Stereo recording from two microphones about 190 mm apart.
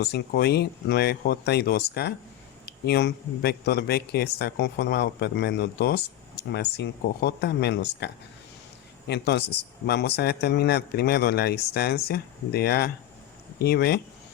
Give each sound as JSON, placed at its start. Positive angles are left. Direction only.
{"t": 0.0, "sound": "a man's voice", "side_deg": 60}